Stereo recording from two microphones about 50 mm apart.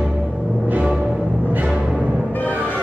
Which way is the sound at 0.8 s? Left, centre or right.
Centre.